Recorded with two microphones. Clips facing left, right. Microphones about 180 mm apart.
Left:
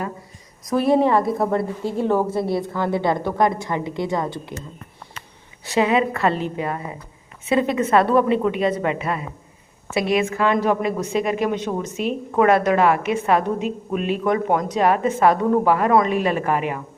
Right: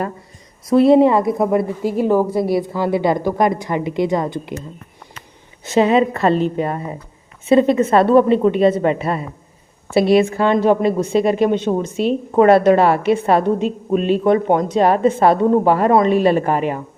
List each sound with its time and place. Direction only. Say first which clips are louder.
0.6 s a woman's voice: right 7 dB; 25° right (ahead or behind)
2.0 s a woman's voice: right 4 dB; centre (ahead or behind)
2.7 s a woman's voice: right 4 dB; 15° right (ahead or behind)
5.6 s a woman's voice: right 5 dB; 25° right (ahead or behind)